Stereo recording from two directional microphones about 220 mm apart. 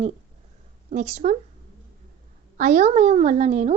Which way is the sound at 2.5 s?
35° right (ahead or behind).